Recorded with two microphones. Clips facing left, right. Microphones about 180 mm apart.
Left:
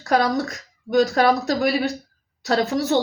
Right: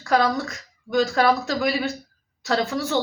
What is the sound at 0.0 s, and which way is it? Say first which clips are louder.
A woman's voice: left 1 dB; 40° left (ahead or behind).